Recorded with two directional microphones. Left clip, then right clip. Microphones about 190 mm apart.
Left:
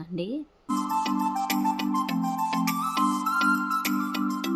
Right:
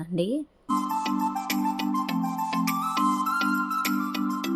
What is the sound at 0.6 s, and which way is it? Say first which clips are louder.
Music: left 1 dB; centre (ahead or behind).